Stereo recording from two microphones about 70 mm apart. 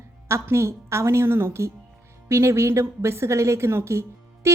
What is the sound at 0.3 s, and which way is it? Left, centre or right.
A woman's voice, right.